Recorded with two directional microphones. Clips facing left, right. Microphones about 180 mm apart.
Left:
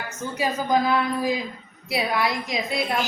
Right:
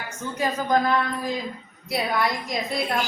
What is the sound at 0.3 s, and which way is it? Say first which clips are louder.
A woman's voice: even; 10° left (ahead or behind).